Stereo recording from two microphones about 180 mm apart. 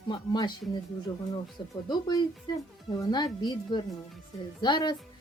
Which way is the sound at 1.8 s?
25° left (ahead or behind).